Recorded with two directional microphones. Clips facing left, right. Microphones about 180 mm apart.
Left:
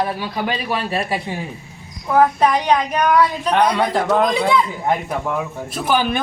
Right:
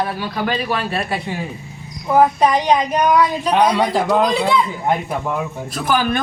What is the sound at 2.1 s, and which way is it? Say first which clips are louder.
A woman's voice: right 1 dB; 15° right (ahead or behind).